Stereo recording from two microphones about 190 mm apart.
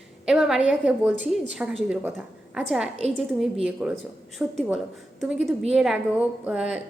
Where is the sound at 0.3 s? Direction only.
5° right (ahead or behind).